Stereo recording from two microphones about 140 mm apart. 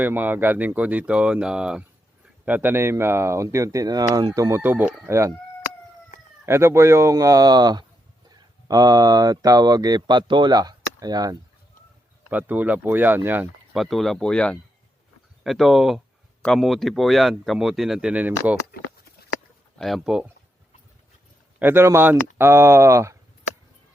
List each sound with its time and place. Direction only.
0.0 s speech: 15° right (ahead or behind)
6.4 s speech: 20° right (ahead or behind)
12.3 s speech: 15° right (ahead or behind)
13.7 s speech: centre (ahead or behind)
19.8 s speech: centre (ahead or behind)
21.6 s speech: 15° right (ahead or behind)